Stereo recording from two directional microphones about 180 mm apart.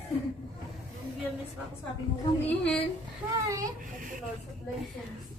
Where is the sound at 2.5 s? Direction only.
10° left (ahead or behind).